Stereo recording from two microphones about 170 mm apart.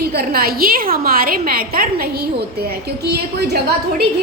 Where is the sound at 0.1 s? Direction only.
65° right (ahead or behind).